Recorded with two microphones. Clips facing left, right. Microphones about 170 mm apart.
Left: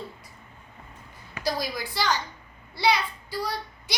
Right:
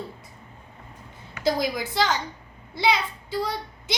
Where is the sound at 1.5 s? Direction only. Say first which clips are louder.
Right 5 dB; 20° right (ahead or behind).